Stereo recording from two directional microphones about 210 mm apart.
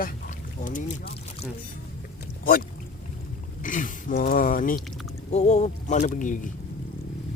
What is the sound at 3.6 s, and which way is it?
Speech, 40° left (ahead or behind).